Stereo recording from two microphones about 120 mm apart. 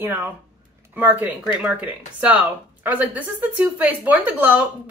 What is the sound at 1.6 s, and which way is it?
A woman's voice, 10° right (ahead or behind).